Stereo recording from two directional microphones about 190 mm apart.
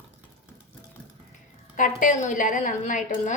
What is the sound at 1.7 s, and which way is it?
A woman's voice, 45° left (ahead or behind).